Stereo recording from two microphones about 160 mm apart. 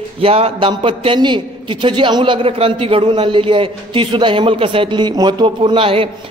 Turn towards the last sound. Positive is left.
turn(degrees=-35)  # may be behind; listen again after turning